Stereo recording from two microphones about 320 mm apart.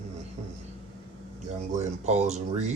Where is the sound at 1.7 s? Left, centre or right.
Right.